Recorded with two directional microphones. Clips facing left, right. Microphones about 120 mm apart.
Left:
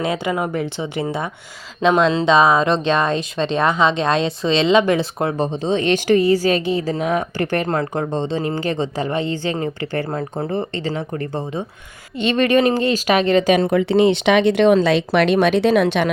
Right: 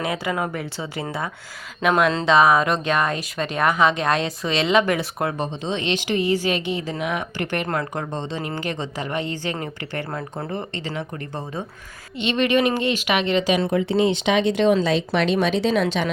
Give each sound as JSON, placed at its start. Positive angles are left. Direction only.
{"t": 0.0, "sound": "speech", "side_deg": 20}
{"t": 5.5, "sound": "speech", "side_deg": 40}
{"t": 13.7, "sound": "speech", "side_deg": 70}